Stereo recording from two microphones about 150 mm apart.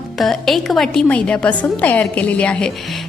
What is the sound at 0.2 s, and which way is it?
A woman's voice, centre (ahead or behind).